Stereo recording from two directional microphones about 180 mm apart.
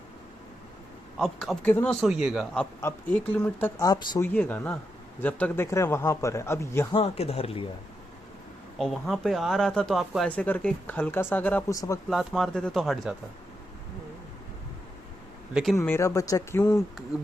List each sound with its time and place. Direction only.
1.2 s speech: centre (ahead or behind)
3.8 s speech: 20° left (ahead or behind)
4.2 s speech: 10° left (ahead or behind)
6.9 s speech: 35° left (ahead or behind)
8.8 s speech: centre (ahead or behind)
12.0 s speech: centre (ahead or behind)
15.7 s speech: 15° left (ahead or behind)
17.1 s speech: 5° right (ahead or behind)